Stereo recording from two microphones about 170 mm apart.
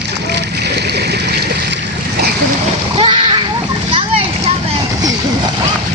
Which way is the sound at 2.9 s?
30° right (ahead or behind).